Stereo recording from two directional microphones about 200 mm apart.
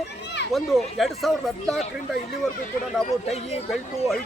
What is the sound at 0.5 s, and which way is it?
Speech, centre (ahead or behind).